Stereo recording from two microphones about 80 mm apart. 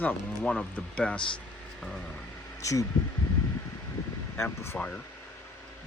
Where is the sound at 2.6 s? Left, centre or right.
Left.